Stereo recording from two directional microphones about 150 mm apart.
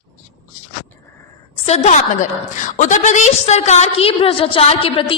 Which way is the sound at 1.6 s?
45° left (ahead or behind).